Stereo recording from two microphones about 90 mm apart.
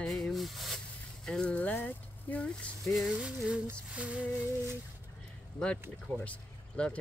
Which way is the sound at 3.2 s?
15° right (ahead or behind).